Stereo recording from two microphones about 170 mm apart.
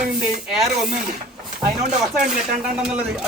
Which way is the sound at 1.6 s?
45° right (ahead or behind).